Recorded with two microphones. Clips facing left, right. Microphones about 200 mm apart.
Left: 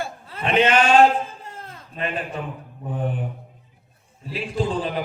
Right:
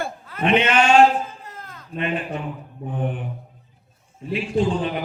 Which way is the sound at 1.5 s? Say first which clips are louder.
Even; 30° left (ahead or behind).